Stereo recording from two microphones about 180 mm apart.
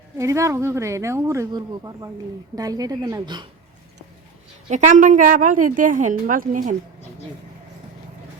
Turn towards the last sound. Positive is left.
turn(degrees=-45)  # may be behind; listen again after turning